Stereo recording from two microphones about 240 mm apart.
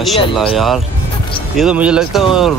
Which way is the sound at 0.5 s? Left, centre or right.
Centre.